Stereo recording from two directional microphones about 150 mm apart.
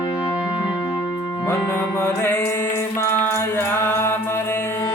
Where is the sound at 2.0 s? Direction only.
15° left (ahead or behind).